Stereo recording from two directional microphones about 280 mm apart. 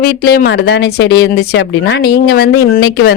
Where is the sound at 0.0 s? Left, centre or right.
Left.